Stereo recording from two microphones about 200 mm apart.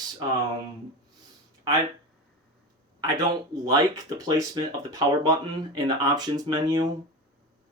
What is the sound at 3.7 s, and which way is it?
Speech, 20° right (ahead or behind).